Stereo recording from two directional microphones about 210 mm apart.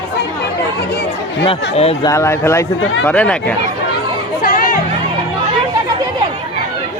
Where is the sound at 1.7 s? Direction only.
30° left (ahead or behind).